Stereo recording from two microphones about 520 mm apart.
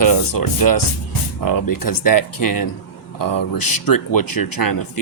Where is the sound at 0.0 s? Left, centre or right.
Left.